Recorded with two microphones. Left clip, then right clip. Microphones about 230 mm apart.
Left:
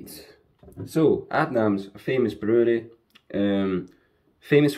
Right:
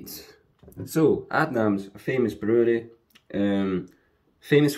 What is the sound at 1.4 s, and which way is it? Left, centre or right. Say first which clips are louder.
Speech: left 1 dB; centre.